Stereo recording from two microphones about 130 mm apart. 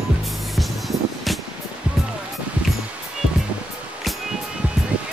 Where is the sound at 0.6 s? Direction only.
Centre (ahead or behind).